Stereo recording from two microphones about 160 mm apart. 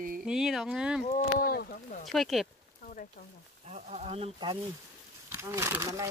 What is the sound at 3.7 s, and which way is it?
Speech, 45° right (ahead or behind).